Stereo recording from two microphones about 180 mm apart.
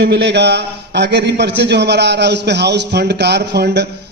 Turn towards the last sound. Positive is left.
turn(degrees=-65)  # may be behind; listen again after turning